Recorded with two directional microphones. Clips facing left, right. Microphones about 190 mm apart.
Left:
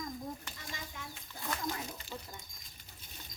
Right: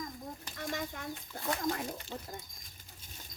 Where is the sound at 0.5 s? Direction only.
60° right (ahead or behind).